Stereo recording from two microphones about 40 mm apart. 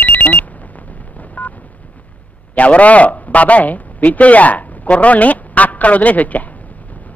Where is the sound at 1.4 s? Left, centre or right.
Left.